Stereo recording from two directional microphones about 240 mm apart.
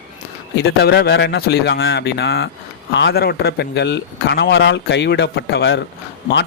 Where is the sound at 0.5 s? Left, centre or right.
Left.